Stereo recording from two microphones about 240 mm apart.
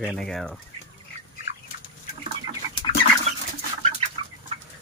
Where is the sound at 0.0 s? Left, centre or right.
Centre.